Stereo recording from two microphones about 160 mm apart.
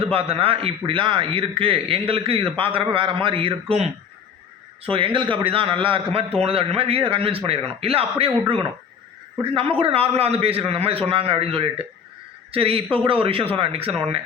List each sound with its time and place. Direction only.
0.3 s a man's voice: 35° right (ahead or behind)
4.9 s a man's voice: 35° right (ahead or behind)